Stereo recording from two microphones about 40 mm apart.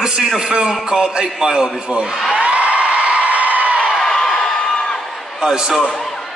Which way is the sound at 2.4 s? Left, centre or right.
Right.